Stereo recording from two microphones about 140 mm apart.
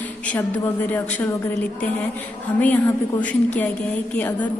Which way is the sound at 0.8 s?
10° left (ahead or behind).